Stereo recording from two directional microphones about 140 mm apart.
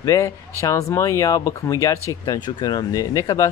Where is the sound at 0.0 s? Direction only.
20° left (ahead or behind).